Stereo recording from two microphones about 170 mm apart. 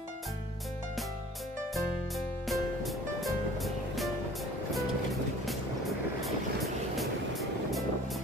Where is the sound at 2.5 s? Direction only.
Centre (ahead or behind).